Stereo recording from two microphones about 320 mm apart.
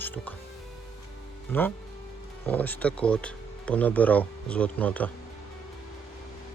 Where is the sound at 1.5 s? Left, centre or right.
Centre.